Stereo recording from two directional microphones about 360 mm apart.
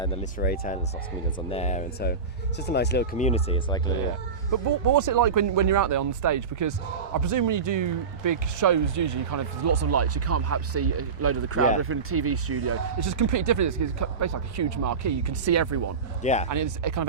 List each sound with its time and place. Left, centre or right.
0.0 s speech: centre
4.5 s a man's voice: right
13.1 s a man's voice: right
16.2 s speech: centre
16.5 s speech: right